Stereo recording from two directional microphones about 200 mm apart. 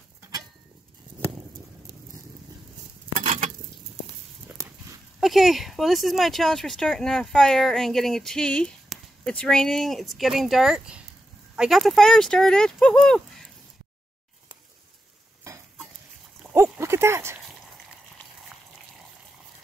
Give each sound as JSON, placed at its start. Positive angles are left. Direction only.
{"t": 3.2, "sound": "dishes", "side_deg": -35}
{"t": 5.2, "sound": "speech", "side_deg": 0}
{"t": 16.6, "sound": "a sound", "side_deg": -10}